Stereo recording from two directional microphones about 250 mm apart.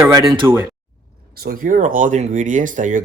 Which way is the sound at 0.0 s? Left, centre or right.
Centre.